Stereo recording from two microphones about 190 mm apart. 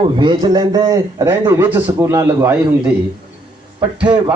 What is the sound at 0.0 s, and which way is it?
A man's voice, 25° right (ahead or behind).